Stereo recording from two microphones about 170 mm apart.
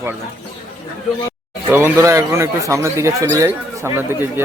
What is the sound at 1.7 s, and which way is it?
Speech, 15° right (ahead or behind).